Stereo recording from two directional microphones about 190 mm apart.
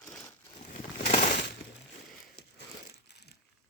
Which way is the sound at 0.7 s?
40° left (ahead or behind).